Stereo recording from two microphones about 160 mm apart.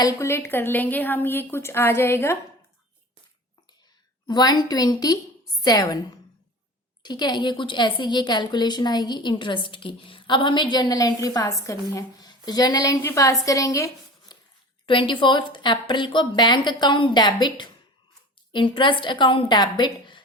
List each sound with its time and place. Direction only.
0.0 s a woman's voice: 15° left (ahead or behind)
4.3 s a woman's voice: 25° left (ahead or behind)
7.0 s a woman's voice: 25° left (ahead or behind)
14.8 s a woman's voice: 30° left (ahead or behind)